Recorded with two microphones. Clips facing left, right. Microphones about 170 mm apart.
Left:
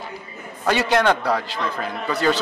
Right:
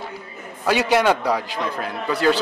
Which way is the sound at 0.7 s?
10° right (ahead or behind).